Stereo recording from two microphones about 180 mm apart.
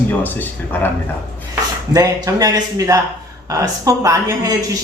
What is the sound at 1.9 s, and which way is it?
A man's voice, 20° right (ahead or behind).